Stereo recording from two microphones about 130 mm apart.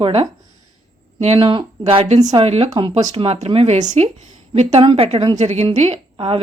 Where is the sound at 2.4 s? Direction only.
55° right (ahead or behind).